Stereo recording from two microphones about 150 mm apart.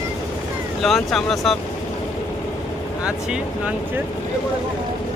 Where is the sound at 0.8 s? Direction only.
Centre (ahead or behind).